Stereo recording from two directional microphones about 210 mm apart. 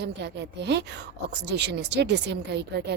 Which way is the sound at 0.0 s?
55° right (ahead or behind).